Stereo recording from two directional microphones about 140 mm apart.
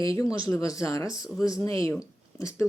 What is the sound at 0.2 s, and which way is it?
Speech, 25° left (ahead or behind).